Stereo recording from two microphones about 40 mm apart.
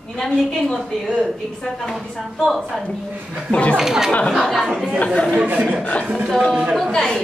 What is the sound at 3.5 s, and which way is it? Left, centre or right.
Speech, left.